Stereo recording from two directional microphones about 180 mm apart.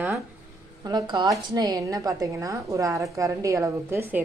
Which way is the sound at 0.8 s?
25° right (ahead or behind).